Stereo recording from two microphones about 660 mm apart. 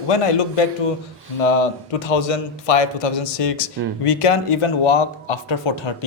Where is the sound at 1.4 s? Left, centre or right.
Left.